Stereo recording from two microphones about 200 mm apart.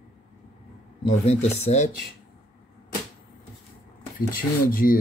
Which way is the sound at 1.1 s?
35° left (ahead or behind).